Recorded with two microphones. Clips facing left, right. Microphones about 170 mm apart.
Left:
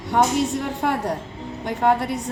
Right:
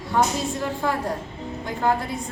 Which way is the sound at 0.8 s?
75° left (ahead or behind).